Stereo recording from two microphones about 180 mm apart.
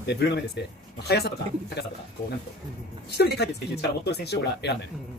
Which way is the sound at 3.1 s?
65° left (ahead or behind).